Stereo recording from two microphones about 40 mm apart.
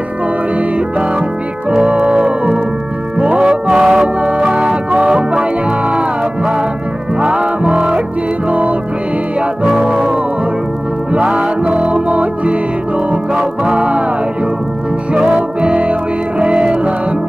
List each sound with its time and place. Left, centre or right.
0.6 s music: right
3.3 s music: centre
3.8 s music: centre
4.2 s organ: right
4.5 s music: centre
5.3 s music: right
7.2 s music: right
8.5 s music: right
9.7 s music: centre
11.3 s music: right
13.3 s music: centre
13.7 s music: right
15.6 s music: right